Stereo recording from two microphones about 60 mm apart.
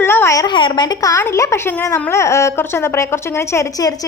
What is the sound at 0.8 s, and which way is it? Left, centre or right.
Speech, left.